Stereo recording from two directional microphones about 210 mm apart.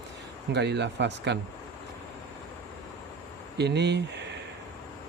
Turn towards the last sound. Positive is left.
turn(degrees=-55)  # may be behind; listen again after turning